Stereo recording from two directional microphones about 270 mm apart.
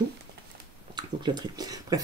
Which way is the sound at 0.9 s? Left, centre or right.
Centre.